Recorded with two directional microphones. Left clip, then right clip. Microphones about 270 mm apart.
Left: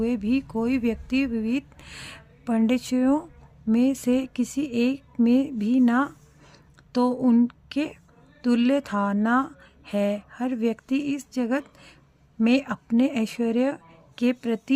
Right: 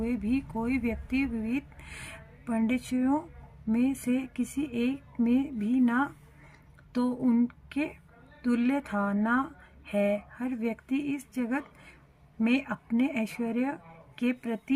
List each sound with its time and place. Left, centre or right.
0.0 s speech: left